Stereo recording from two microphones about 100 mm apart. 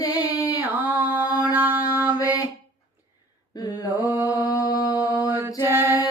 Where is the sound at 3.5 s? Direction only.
40° left (ahead or behind).